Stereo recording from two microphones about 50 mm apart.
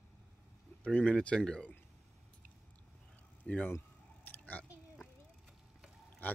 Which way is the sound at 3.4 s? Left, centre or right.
Left.